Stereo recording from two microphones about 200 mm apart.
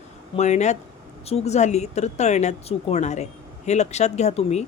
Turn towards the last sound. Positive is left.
turn(degrees=35)  # may be behind; listen again after turning